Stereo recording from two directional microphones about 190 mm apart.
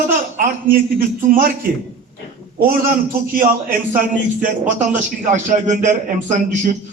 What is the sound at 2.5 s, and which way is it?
A man's voice, 50° right (ahead or behind).